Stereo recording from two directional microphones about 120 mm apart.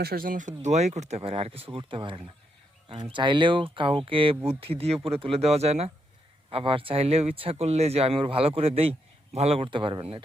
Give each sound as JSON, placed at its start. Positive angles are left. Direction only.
{"t": 0.3, "sound": "speech", "side_deg": -90}
{"t": 6.5, "sound": "speech", "side_deg": -50}